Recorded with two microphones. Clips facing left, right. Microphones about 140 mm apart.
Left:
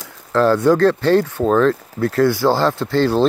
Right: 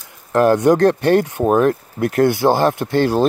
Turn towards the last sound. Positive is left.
turn(degrees=-15)  # may be behind; listen again after turning